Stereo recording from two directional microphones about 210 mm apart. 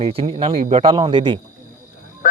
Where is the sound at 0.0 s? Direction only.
25° right (ahead or behind).